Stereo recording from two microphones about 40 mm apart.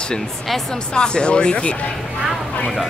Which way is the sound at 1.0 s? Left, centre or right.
Left.